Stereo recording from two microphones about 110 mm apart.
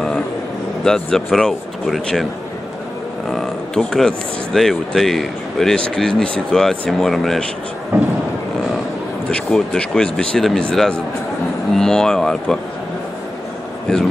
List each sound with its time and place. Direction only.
0.8 s speech: 5° left (ahead or behind)
3.3 s speech: 5° left (ahead or behind)
7.9 s speech: 20° right (ahead or behind)
9.3 s speech: 5° left (ahead or behind)